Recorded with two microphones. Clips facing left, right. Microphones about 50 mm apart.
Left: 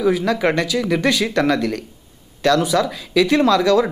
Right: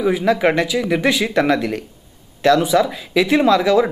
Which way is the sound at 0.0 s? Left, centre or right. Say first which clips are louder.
Right 1 dB; centre.